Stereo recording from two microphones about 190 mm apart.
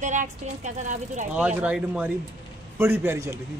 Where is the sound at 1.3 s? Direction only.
5° right (ahead or behind).